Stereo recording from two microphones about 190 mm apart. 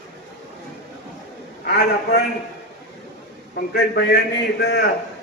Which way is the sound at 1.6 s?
60° left (ahead or behind).